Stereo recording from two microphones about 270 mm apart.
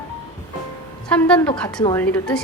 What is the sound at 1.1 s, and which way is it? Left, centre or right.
Speech, centre.